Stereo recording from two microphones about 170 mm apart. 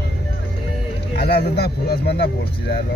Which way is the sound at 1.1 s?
70° left (ahead or behind).